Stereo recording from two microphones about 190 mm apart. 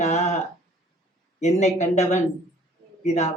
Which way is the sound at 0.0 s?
35° left (ahead or behind).